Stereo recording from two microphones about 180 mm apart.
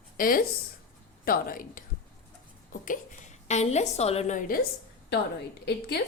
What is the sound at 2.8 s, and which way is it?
A woman's voice, 45° left (ahead or behind).